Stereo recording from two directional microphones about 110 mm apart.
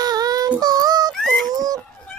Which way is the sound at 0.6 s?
35° right (ahead or behind).